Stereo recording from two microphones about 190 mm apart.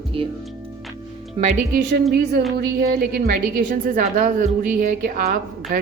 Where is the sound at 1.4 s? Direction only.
45° right (ahead or behind).